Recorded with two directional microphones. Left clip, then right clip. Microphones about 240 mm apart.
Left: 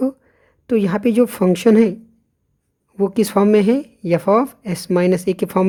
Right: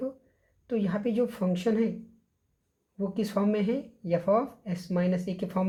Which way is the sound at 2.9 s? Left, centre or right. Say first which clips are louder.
Left 14 dB; left.